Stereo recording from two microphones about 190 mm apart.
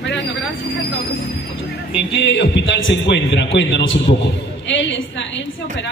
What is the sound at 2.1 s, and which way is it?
A man's voice, 70° left (ahead or behind).